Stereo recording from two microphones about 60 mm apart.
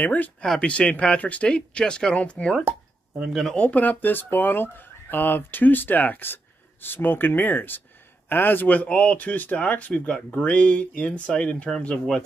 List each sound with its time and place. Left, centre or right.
0.0 s speech: left
0.4 s speech: centre
3.2 s speech: centre
3.5 s speech: left